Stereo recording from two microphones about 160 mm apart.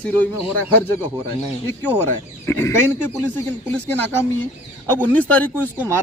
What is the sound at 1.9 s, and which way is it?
A man's voice, 15° left (ahead or behind).